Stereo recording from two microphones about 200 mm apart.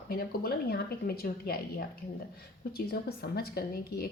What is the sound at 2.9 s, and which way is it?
A woman's voice, 50° left (ahead or behind).